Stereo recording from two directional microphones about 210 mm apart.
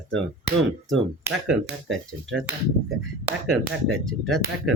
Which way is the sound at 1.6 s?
65° right (ahead or behind).